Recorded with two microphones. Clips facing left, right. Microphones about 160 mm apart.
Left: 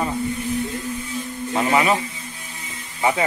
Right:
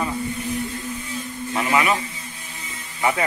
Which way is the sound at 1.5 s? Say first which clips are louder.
Left 2 dB; 25° left (ahead or behind).